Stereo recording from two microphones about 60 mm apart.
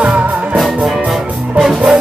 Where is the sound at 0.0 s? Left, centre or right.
Right.